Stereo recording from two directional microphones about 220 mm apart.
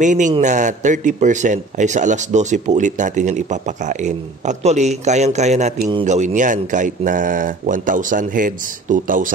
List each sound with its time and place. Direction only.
0.0 s a man's voice: 35° right (ahead or behind)